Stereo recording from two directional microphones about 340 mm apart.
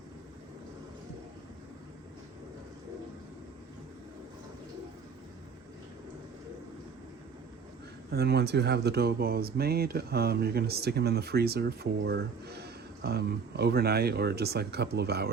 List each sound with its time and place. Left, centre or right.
8.1 s speech: right